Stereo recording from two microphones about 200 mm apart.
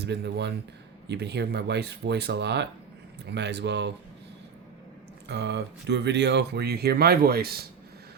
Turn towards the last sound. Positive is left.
turn(degrees=-50)  # may be behind; listen again after turning